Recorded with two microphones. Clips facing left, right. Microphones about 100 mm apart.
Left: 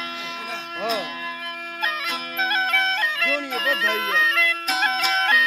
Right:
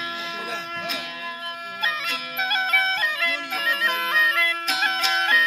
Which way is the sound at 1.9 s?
Centre (ahead or behind).